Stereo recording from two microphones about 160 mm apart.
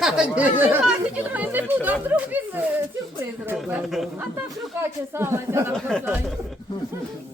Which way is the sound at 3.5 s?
Centre (ahead or behind).